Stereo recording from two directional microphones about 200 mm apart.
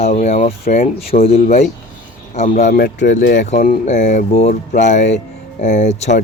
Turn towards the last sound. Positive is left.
turn(degrees=35)  # may be behind; listen again after turning